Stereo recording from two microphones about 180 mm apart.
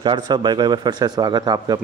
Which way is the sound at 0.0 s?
25° right (ahead or behind).